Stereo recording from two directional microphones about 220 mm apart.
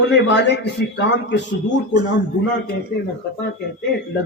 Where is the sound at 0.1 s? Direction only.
50° left (ahead or behind).